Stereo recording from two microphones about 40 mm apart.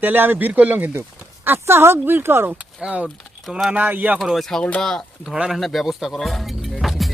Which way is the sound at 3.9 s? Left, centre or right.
Right.